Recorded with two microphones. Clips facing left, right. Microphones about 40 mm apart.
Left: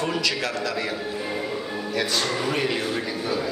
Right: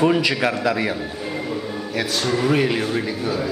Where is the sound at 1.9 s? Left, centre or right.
Centre.